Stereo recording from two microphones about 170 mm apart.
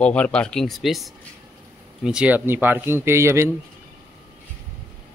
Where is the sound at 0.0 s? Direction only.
5° left (ahead or behind); by 3.4 s 15° right (ahead or behind).